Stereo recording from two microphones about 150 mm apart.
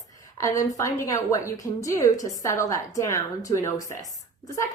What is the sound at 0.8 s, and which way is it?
A woman's voice, 20° left (ahead or behind).